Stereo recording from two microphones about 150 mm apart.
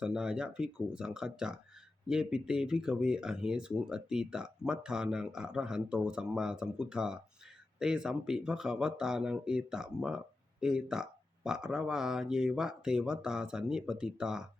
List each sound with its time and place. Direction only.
0.0 s speech: 5° right (ahead or behind)